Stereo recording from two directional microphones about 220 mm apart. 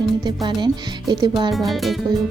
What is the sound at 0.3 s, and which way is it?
Speech, 20° right (ahead or behind).